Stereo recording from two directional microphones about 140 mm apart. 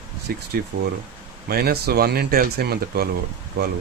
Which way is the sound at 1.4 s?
90° right.